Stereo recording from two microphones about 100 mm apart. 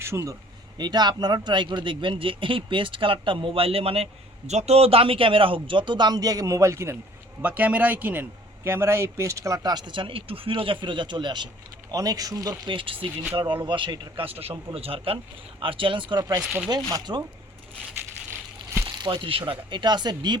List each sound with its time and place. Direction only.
0.0 s a man's voice: 25° right (ahead or behind)
0.8 s a man's voice: 45° right (ahead or behind); by 4.1 s 75° right (ahead or behind)
4.5 s a man's voice: 90° right; by 6.9 s 30° right (ahead or behind)
7.4 s a man's voice: 15° right (ahead or behind)
9.7 s a man's voice: 50° right (ahead or behind)
11.9 s speech: 40° right (ahead or behind)
12.7 s a man's voice: 60° right (ahead or behind)
14.3 s a man's voice: 75° right (ahead or behind)
15.6 s a man's voice: 60° right (ahead or behind)
18.9 s speech: 45° right (ahead or behind)